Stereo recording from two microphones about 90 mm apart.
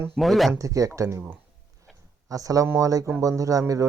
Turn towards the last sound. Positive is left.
turn(degrees=-40)  # may be behind; listen again after turning